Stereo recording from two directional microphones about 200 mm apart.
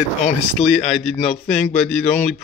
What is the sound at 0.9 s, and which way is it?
Speech, centre (ahead or behind).